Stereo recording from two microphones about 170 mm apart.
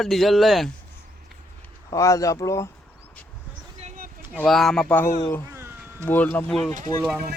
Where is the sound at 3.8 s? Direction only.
55° right (ahead or behind).